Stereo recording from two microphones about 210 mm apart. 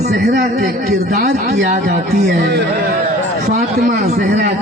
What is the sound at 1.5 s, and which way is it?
Speech, 35° right (ahead or behind).